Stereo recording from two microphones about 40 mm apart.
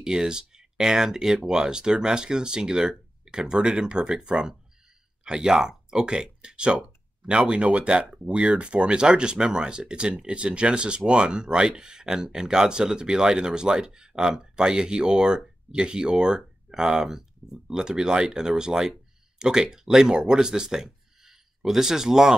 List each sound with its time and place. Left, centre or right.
0.0 s speech: centre